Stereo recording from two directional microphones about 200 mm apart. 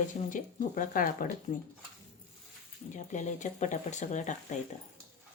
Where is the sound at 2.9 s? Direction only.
35° left (ahead or behind).